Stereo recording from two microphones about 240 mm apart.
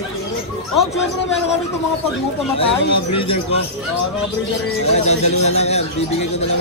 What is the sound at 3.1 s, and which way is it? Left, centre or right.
Speech, left.